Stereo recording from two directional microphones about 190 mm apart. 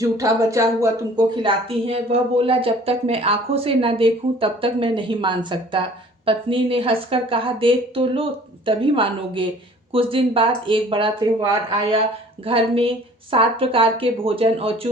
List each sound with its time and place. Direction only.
0.0 s a woman's voice: 15° right (ahead or behind)